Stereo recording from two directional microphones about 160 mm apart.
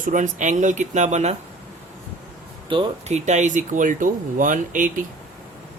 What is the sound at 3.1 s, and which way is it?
Speech, 45° right (ahead or behind).